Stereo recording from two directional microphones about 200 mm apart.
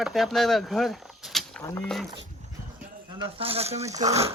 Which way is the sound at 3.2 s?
30° right (ahead or behind).